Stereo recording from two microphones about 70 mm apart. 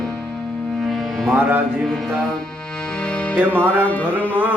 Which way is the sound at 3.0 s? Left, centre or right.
Centre.